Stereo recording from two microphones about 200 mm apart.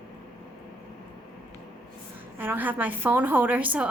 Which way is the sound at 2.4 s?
10° right (ahead or behind).